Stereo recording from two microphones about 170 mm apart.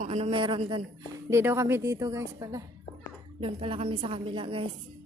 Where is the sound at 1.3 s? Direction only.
15° right (ahead or behind).